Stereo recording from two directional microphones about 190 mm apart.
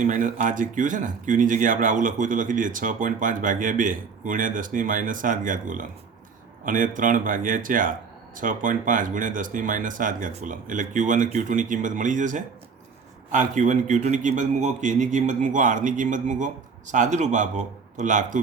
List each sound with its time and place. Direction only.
0.0 s a man's voice: 40° right (ahead or behind)